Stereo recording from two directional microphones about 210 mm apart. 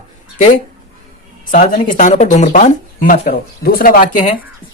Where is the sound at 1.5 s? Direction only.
35° left (ahead or behind).